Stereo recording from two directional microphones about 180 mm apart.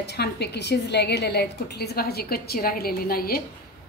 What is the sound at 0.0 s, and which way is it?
A woman's voice, 65° left (ahead or behind).